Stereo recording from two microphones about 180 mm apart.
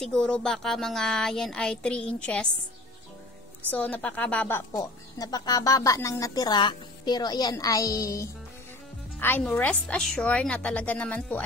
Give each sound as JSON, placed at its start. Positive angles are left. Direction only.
{"t": 0.0, "sound": "speech", "side_deg": 5}
{"t": 3.7, "sound": "a woman's voice", "side_deg": 10}